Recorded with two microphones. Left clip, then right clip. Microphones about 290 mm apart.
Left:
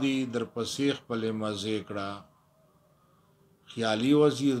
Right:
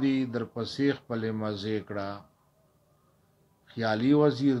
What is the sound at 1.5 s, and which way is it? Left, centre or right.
Speech, left.